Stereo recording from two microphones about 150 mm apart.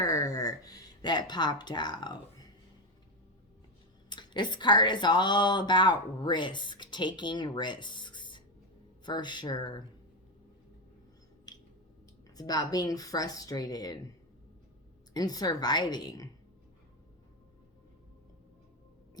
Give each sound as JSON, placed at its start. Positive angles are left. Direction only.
{"t": 0.0, "sound": "speech", "side_deg": 25}
{"t": 4.1, "sound": "a woman's voice", "side_deg": 30}
{"t": 12.4, "sound": "speech", "side_deg": 25}
{"t": 15.1, "sound": "speech", "side_deg": 25}